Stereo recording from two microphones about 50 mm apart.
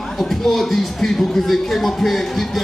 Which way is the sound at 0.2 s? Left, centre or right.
Centre.